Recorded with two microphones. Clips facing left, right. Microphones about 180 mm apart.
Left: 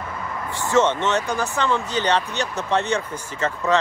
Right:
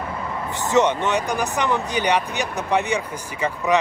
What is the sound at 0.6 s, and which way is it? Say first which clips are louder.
Speech: even; 20° right (ahead or behind).